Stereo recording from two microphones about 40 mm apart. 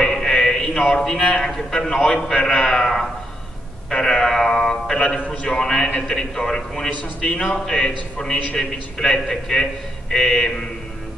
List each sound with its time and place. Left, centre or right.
0.0 s music: centre
1.2 s a man's voice: centre
4.9 s a man's voice: left; by 10.5 s centre